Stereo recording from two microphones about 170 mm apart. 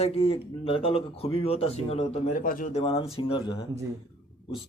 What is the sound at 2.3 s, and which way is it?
Speech, 55° left (ahead or behind).